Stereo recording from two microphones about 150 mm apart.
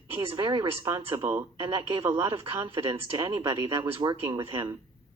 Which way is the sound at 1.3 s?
15° right (ahead or behind).